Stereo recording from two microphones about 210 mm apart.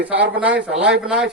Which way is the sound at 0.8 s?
5° right (ahead or behind).